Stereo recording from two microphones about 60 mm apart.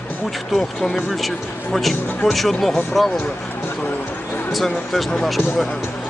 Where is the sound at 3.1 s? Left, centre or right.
Left.